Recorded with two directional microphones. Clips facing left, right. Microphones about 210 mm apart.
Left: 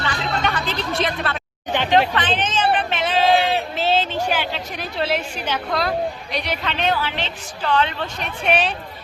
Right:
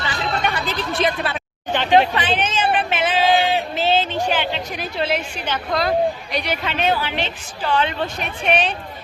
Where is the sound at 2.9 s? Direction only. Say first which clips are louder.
Even; 5° right (ahead or behind).